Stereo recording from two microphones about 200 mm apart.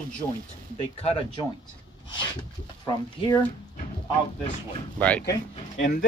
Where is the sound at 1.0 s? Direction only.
25° left (ahead or behind).